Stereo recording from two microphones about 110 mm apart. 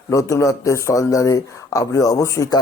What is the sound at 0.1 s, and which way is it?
Speech, 30° left (ahead or behind).